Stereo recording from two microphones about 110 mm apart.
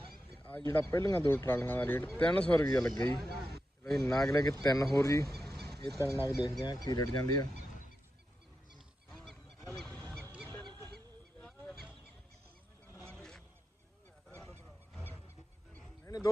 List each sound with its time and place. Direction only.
0.6 s speech: 20° left (ahead or behind)
2.6 s speech: 30° left (ahead or behind)
2.8 s speech: 5° left (ahead or behind)
4.3 s speech: 30° left (ahead or behind)
5.3 s a sound: centre (ahead or behind)
6.2 s speech: 35° left (ahead or behind)
9.0 s goose: 5° left (ahead or behind)
13.1 s a sound: 5° left (ahead or behind)
16.0 s a sound: 30° left (ahead or behind)